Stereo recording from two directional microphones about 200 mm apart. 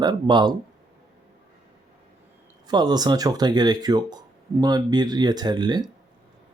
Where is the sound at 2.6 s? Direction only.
20° right (ahead or behind).